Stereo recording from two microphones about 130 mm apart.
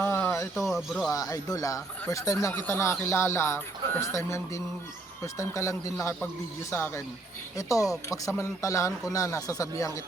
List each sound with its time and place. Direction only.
0.0 s a sound: 15° left (ahead or behind)
0.7 s speech: centre (ahead or behind)
1.1 s speech: 25° left (ahead or behind)